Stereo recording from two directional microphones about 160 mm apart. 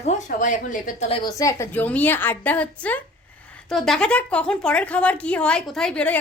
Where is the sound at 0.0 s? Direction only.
50° left (ahead or behind).